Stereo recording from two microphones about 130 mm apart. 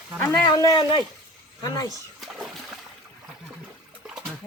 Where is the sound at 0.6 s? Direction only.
30° left (ahead or behind).